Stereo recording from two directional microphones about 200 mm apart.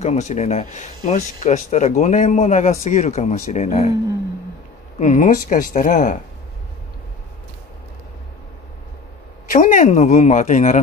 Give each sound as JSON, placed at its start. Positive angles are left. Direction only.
{"t": 0.0, "sound": "speech", "side_deg": 35}
{"t": 4.9, "sound": "speech", "side_deg": 40}
{"t": 9.5, "sound": "speech", "side_deg": 40}